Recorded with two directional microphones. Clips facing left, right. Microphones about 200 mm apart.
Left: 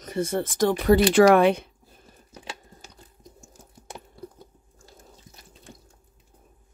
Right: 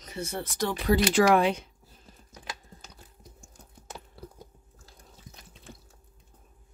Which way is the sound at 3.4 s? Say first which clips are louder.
Left 3 dB; 5° left (ahead or behind).